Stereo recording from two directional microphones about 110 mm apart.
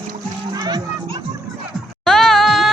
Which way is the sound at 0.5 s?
40° right (ahead or behind).